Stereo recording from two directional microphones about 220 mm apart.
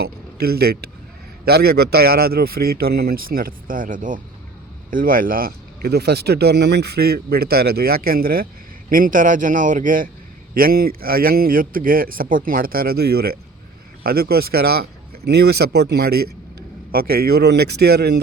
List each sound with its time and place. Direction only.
0.0 s a man's voice: 45° right (ahead or behind)